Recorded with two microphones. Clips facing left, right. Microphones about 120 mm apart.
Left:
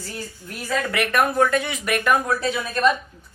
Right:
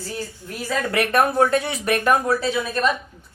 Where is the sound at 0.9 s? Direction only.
30° right (ahead or behind).